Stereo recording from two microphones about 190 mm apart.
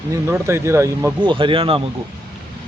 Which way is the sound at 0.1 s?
15° right (ahead or behind).